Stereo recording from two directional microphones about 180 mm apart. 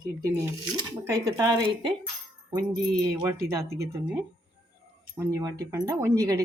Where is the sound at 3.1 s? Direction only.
15° right (ahead or behind).